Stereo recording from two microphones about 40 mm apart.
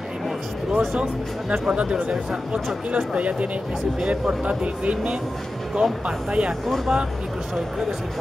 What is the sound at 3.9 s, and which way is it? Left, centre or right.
Speech, right.